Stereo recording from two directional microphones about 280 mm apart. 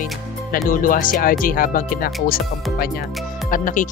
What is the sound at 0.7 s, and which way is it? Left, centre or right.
Speech, left.